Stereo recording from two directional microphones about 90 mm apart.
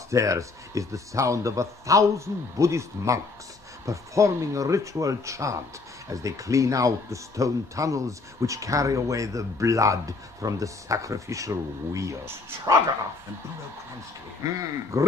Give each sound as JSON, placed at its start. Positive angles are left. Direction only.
{"t": 0.1, "sound": "speech", "side_deg": -35}
{"t": 14.9, "sound": "speech", "side_deg": -35}